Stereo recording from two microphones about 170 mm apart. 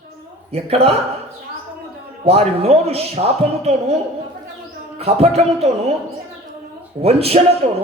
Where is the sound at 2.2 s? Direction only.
35° right (ahead or behind).